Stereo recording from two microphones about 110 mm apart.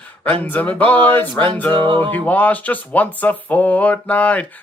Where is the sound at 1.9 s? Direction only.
45° right (ahead or behind).